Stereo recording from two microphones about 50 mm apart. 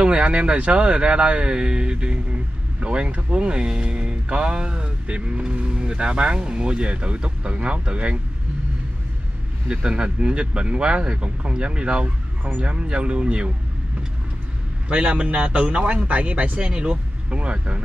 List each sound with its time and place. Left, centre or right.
0.0 s speech: right
9.7 s speech: right
14.9 s speech: right